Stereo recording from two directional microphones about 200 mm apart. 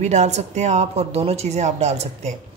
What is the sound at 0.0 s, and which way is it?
Speech, 35° right (ahead or behind).